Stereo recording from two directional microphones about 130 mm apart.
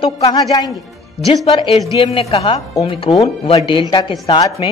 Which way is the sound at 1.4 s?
45° left (ahead or behind).